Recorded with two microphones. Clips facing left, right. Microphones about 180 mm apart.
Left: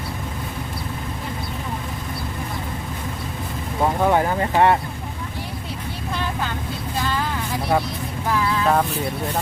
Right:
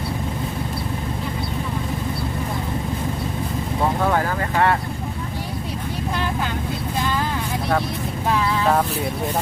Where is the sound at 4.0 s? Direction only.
20° left (ahead or behind).